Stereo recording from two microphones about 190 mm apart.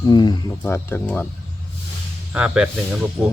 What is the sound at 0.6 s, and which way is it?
Speech, 10° left (ahead or behind).